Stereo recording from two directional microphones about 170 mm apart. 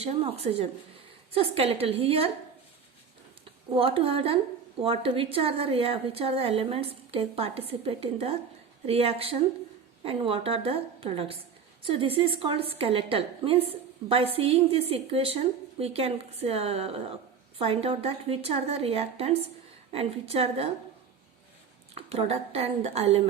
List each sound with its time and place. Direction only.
0.0 s a woman's voice: 35° right (ahead or behind)
3.7 s a woman's voice: 30° right (ahead or behind)
21.9 s a woman's voice: 35° right (ahead or behind)